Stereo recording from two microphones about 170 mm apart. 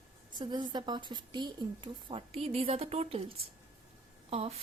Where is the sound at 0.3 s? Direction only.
25° right (ahead or behind).